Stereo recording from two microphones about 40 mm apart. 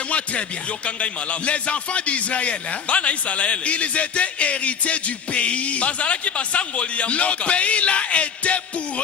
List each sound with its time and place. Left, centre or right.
0.9 s a man's voice: left